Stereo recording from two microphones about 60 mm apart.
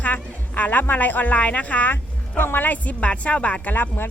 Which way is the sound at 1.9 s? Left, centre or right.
Left.